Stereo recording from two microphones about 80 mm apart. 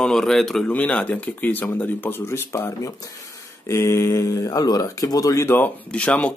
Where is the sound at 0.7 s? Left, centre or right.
Centre; by 5.5 s left.